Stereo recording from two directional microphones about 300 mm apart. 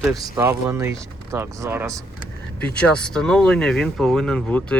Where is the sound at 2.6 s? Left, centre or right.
Centre.